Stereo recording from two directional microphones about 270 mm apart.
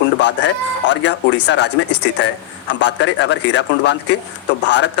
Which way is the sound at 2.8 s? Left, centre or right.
Left.